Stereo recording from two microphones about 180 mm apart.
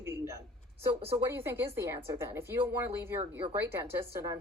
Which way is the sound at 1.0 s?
30° right (ahead or behind).